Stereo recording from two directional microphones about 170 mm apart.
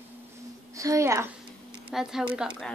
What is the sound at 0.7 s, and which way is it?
Speech, 20° right (ahead or behind).